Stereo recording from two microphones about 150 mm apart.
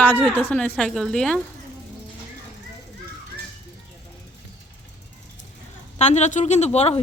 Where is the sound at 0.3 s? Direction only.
10° left (ahead or behind).